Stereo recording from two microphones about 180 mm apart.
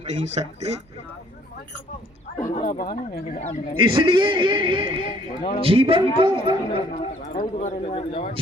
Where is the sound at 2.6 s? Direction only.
45° left (ahead or behind).